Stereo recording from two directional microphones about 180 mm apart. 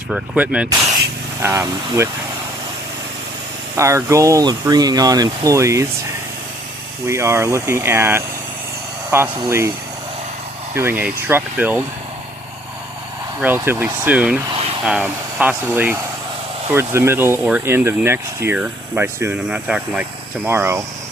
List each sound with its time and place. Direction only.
0.1 s speech: 5° right (ahead or behind)
3.8 s speech: 15° right (ahead or behind)
7.1 s speech: 15° right (ahead or behind)
10.8 s speech: 10° right (ahead or behind)
13.4 s speech: 10° right (ahead or behind)